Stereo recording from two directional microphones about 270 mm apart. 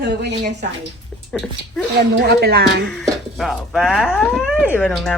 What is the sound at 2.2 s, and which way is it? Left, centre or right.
Speech, right.